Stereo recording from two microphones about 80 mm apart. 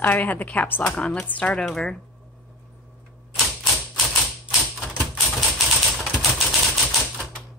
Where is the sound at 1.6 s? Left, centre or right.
Centre.